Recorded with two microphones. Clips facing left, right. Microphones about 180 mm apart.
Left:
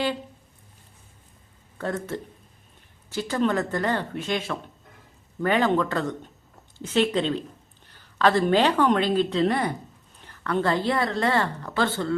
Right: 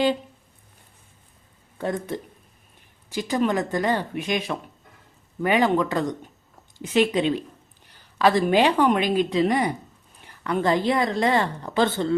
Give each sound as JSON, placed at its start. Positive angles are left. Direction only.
{"t": 1.8, "sound": "a woman's voice", "side_deg": -15}